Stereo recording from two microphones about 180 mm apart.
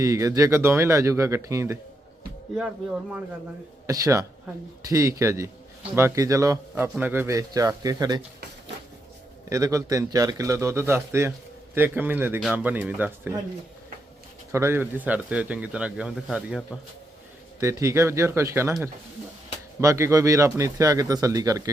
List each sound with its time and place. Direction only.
0.0 s a man's voice: 15° right (ahead or behind)
2.6 s speech: 5° right (ahead or behind)
3.8 s a man's voice: 20° right (ahead or behind)
9.5 s a man's voice: 15° right (ahead or behind)
14.5 s a man's voice: 15° right (ahead or behind)
17.6 s a man's voice: 15° right (ahead or behind)
19.8 s speech: 15° right (ahead or behind)